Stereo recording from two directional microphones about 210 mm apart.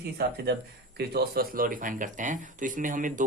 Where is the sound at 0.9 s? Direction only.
45° right (ahead or behind).